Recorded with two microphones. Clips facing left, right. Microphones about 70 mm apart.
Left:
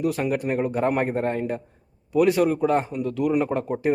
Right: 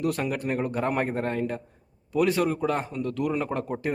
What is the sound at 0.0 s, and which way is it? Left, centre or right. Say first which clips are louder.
Speech: left 3 dB; centre.